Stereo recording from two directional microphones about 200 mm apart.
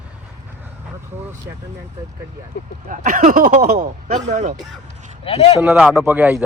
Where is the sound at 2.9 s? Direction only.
40° right (ahead or behind).